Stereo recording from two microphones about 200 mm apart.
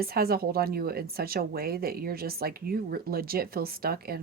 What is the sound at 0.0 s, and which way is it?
Speech, 50° right (ahead or behind).